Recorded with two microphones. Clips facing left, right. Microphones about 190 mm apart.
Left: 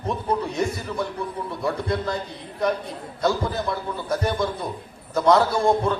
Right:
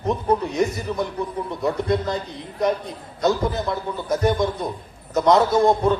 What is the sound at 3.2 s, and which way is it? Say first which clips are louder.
A man's voice: right 2 dB; 20° right (ahead or behind).